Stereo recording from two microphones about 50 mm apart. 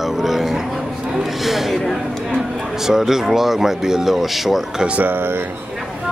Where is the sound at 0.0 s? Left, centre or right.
Centre.